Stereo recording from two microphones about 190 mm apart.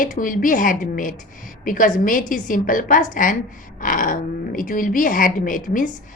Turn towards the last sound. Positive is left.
turn(degrees=45)  # may be behind; listen again after turning